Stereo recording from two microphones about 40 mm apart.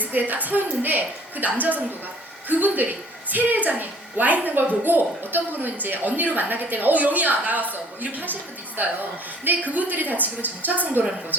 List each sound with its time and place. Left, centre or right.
0.0 s a woman's voice: right